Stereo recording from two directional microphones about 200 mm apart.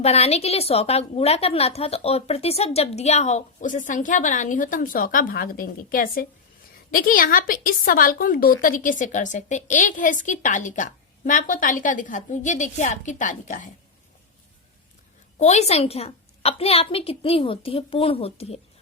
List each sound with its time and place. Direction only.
0.0 s a woman's voice: 30° left (ahead or behind)
15.4 s a woman's voice: 35° left (ahead or behind)